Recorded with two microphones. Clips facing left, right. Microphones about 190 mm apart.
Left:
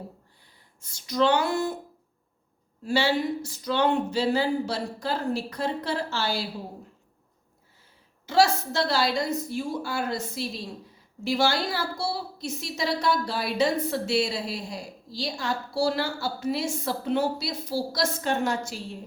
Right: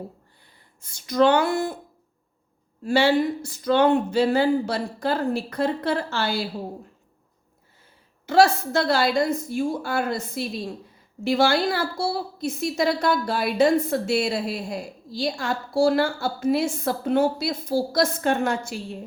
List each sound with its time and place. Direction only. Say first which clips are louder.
0.8 s a woman's voice: right 5 dB; 55° right (ahead or behind)
2.8 s speech: right 5 dB; 55° right (ahead or behind)
8.3 s a woman's voice: right 4 dB; 55° right (ahead or behind)